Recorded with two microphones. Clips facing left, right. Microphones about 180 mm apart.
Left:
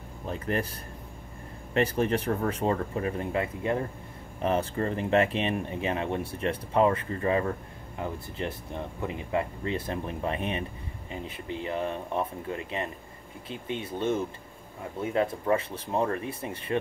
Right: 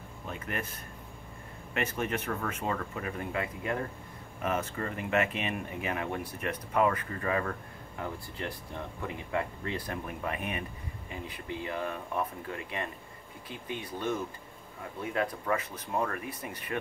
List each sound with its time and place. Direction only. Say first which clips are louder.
0.3 s speech: left 7 dB; 35° left (ahead or behind)